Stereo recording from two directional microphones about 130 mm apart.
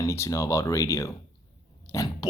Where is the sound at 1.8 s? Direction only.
30° left (ahead or behind).